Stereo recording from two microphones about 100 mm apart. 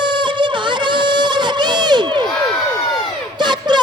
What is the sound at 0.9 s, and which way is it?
Crowd, 50° right (ahead or behind).